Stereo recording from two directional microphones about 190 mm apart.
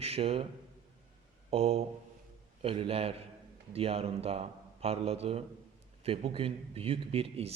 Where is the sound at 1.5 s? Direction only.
30° right (ahead or behind).